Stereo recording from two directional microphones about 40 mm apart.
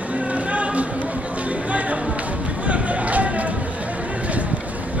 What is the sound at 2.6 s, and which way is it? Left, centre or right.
Music, right.